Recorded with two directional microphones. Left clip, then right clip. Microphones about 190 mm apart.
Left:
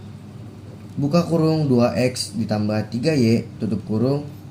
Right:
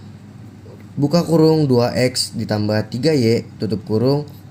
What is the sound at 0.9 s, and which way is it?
A man's voice, 50° right (ahead or behind).